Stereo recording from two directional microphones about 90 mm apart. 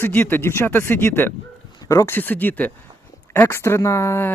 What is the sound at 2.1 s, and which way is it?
Speech, 20° left (ahead or behind).